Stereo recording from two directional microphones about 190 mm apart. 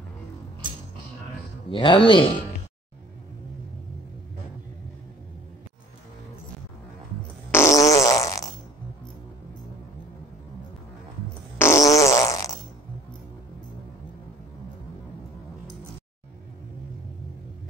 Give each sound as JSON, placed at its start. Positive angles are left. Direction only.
{"t": 1.7, "sound": "speech", "side_deg": 25}
{"t": 7.5, "sound": "fart", "side_deg": 15}
{"t": 11.5, "sound": "fart", "side_deg": 15}